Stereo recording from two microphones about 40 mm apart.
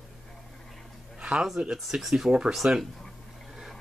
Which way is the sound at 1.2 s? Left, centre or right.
Centre.